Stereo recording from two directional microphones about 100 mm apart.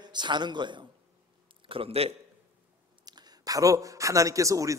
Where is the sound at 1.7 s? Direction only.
75° right (ahead or behind).